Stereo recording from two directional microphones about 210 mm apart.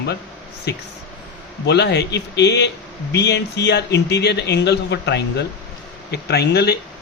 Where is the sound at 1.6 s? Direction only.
55° left (ahead or behind).